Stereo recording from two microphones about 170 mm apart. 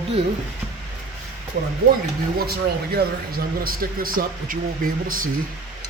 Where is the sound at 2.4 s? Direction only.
70° right (ahead or behind).